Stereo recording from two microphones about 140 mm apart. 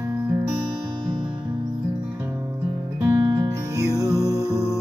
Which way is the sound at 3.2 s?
25° right (ahead or behind).